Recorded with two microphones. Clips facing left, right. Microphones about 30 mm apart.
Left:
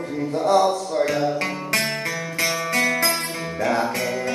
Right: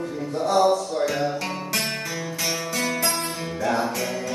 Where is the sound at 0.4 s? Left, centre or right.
Centre.